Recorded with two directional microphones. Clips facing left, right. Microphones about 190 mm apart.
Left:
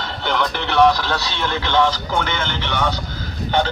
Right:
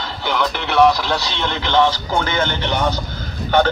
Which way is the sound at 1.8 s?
5° right (ahead or behind).